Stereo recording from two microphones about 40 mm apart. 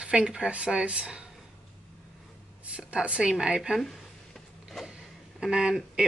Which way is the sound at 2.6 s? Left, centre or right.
Right.